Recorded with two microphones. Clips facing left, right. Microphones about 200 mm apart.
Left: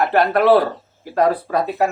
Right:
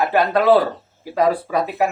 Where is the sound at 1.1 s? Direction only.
10° right (ahead or behind).